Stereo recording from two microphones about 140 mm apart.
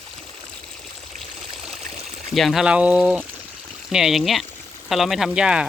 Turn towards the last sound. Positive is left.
turn(degrees=-5)  # may be behind; listen again after turning